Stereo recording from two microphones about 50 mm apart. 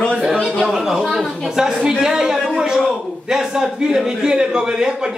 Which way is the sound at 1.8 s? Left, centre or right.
Centre.